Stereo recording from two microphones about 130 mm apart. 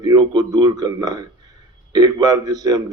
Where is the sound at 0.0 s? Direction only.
30° right (ahead or behind).